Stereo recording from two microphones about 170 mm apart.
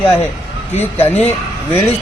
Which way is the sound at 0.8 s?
10° left (ahead or behind).